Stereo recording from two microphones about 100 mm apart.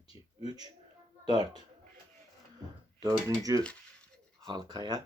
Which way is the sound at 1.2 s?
45° right (ahead or behind).